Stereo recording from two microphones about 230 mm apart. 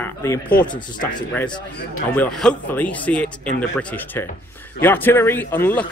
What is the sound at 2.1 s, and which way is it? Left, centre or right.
Speech, centre.